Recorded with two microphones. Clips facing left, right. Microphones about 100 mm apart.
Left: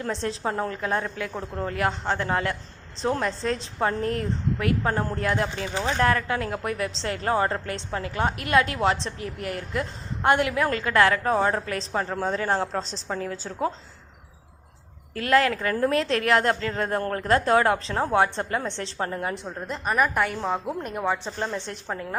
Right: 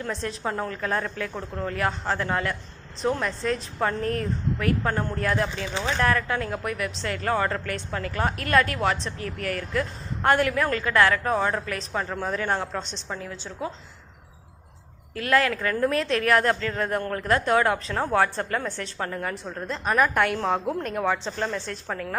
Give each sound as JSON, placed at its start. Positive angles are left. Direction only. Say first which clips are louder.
{"t": 0.0, "sound": "a woman's voice", "louder": "left 2 dB", "side_deg": 30}
{"t": 15.1, "sound": "a woman's voice", "louder": "left 1 dB", "side_deg": 30}
{"t": 19.5, "sound": "a woman's voice", "louder": "right 1 dB", "side_deg": 15}
{"t": 19.8, "sound": "a woman's voice", "louder": "right 1 dB", "side_deg": 5}
{"t": 21.5, "sound": "a woman's voice", "louder": "even", "side_deg": 20}